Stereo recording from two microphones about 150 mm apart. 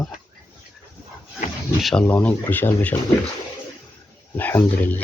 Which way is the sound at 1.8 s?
Centre (ahead or behind).